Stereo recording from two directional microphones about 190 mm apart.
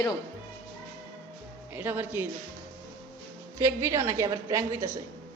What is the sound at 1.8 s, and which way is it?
Speech, 10° right (ahead or behind).